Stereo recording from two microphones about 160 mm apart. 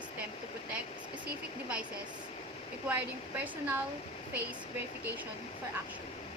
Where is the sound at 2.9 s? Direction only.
10° right (ahead or behind).